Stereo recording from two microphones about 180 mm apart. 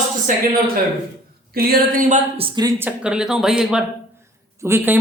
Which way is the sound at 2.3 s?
25° right (ahead or behind).